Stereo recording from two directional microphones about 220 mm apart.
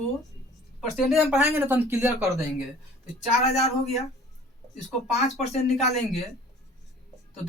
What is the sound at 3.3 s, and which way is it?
Speech, 30° left (ahead or behind).